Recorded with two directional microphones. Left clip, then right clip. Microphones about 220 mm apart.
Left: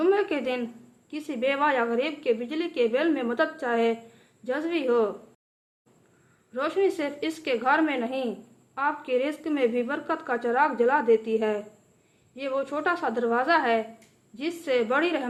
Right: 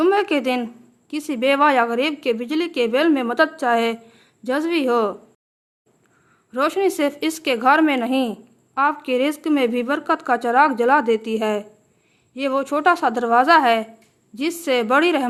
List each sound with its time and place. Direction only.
0.0 s a sound: 45° right (ahead or behind)
1.1 s a woman's voice: 45° right (ahead or behind)
6.5 s a woman's voice: 50° right (ahead or behind)